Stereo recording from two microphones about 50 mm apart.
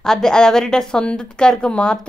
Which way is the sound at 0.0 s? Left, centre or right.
Centre.